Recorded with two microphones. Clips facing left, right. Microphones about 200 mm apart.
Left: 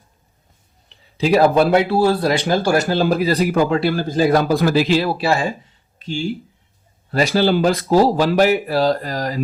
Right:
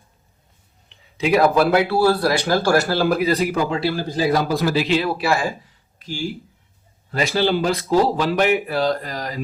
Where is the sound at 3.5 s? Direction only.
50° left (ahead or behind); by 6.2 s 25° left (ahead or behind).